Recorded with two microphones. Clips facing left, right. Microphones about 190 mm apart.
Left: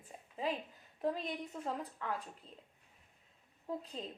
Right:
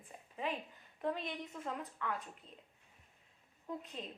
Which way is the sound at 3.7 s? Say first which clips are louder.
Left 3 dB; 30° left (ahead or behind).